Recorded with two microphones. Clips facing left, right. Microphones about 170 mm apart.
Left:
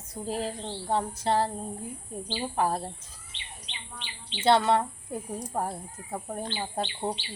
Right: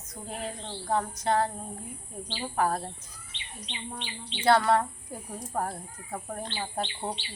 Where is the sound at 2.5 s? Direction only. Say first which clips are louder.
Right 1 dB; 25° left (ahead or behind).